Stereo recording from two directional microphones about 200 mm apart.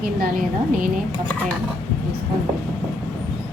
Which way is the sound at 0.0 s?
45° right (ahead or behind).